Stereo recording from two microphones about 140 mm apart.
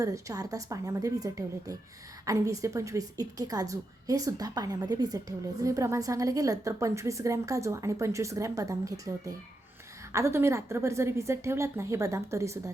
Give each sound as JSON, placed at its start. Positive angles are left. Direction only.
{"t": 0.0, "sound": "a woman's voice", "side_deg": -25}